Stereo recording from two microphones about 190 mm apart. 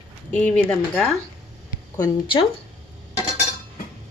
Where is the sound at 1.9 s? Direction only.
25° left (ahead or behind).